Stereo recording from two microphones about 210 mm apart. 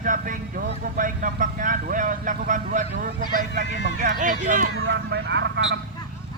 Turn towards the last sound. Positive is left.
turn(degrees=-60)  # may be behind; listen again after turning